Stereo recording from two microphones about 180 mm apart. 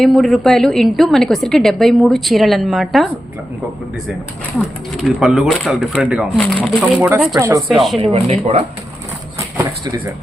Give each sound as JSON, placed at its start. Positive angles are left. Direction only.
{"t": 0.0, "sound": "a woman's voice", "side_deg": 0}
{"t": 5.0, "sound": "a woman's voice", "side_deg": 0}
{"t": 6.4, "sound": "speech", "side_deg": 10}
{"t": 7.0, "sound": "speech", "side_deg": -5}
{"t": 7.3, "sound": "speech", "side_deg": -15}
{"t": 7.7, "sound": "a woman's voice", "side_deg": 0}
{"t": 7.9, "sound": "speech", "side_deg": -30}